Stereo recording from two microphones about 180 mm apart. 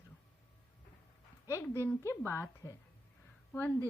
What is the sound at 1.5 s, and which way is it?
A woman's voice, 15° left (ahead or behind).